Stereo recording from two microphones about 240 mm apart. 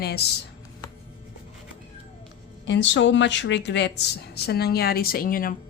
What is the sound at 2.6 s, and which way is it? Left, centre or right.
Speech, left.